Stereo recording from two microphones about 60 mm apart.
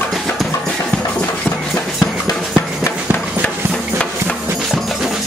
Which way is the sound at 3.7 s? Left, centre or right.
Centre.